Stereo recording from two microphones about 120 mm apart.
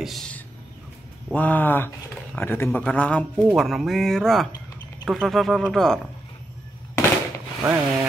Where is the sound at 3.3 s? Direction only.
10° right (ahead or behind).